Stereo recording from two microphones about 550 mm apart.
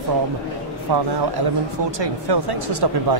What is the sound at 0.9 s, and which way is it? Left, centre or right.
A man's voice, right.